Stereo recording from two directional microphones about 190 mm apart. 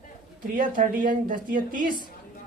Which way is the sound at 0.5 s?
45° right (ahead or behind).